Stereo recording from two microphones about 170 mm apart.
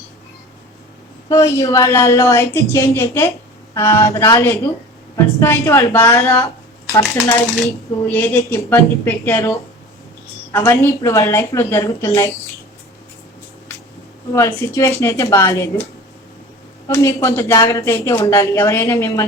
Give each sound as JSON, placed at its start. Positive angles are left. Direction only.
{"t": 1.3, "sound": "speech", "side_deg": 15}
{"t": 7.6, "sound": "speech", "side_deg": 10}
{"t": 10.7, "sound": "speech", "side_deg": 15}
{"t": 14.3, "sound": "speech", "side_deg": 15}
{"t": 16.9, "sound": "speech", "side_deg": 15}